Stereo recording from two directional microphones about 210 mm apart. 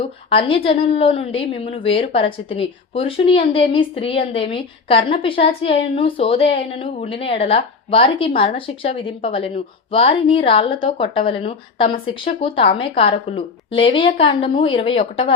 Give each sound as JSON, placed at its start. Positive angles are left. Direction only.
{"t": 0.0, "sound": "speech", "side_deg": 25}